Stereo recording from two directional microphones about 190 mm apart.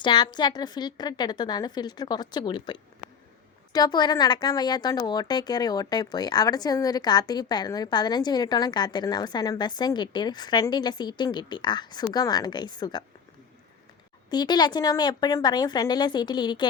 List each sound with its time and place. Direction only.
0.0 s speech: 25° left (ahead or behind)
14.3 s speech: 20° left (ahead or behind)